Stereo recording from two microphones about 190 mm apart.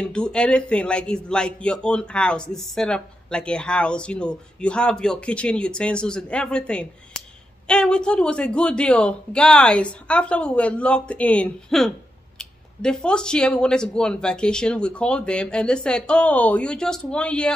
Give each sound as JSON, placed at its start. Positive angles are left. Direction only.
{"t": 0.0, "sound": "a man's voice", "side_deg": 5}